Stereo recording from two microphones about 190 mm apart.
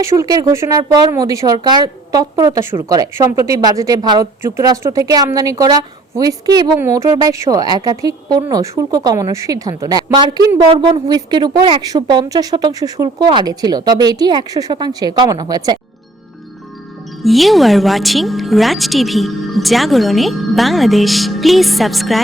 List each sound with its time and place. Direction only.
0.0 s a woman's voice: 20° right (ahead or behind)
17.2 s speech: centre (ahead or behind)